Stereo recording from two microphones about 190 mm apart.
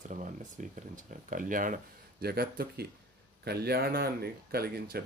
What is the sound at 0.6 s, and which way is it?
Speech, 40° right (ahead or behind).